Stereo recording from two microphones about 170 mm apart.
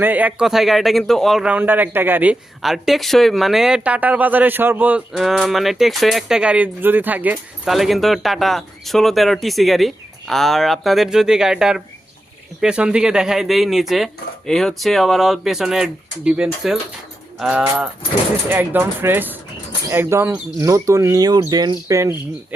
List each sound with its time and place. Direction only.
0.0 s speech: 10° right (ahead or behind)